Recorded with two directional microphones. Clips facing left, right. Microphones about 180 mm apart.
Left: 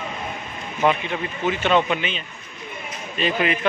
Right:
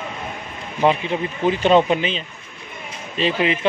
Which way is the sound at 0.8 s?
30° right (ahead or behind).